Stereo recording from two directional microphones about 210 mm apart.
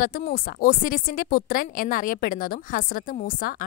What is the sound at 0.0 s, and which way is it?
A woman's voice, 45° left (ahead or behind).